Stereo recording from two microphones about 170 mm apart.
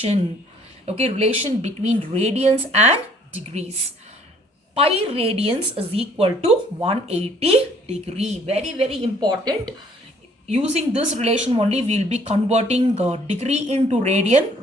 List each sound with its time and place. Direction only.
0.9 s speech: 40° right (ahead or behind)
4.7 s speech: 35° right (ahead or behind)
9.2 s speech: 25° right (ahead or behind)
10.5 s speech: 40° right (ahead or behind)